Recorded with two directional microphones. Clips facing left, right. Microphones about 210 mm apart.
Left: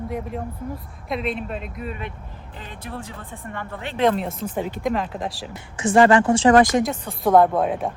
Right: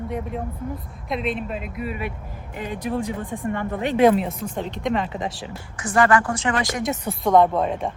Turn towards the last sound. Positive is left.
turn(degrees=5)  # may be behind; listen again after turning